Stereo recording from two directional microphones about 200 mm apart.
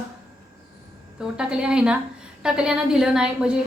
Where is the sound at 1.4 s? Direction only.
5° right (ahead or behind).